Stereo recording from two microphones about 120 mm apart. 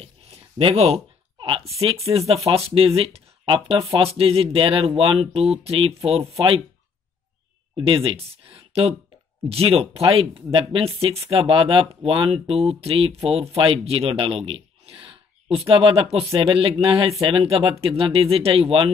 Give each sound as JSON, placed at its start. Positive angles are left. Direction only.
{"t": 0.0, "sound": "a sound", "side_deg": -50}
{"t": 2.5, "sound": "speech", "side_deg": -50}
{"t": 7.7, "sound": "a man's voice", "side_deg": -45}